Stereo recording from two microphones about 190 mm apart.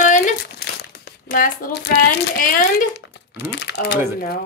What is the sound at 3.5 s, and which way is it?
Speech, 65° left (ahead or behind).